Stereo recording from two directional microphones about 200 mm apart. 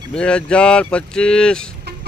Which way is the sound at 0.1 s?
5° left (ahead or behind).